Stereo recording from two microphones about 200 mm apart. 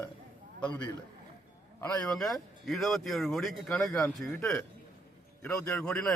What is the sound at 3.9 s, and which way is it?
Speech, 15° left (ahead or behind).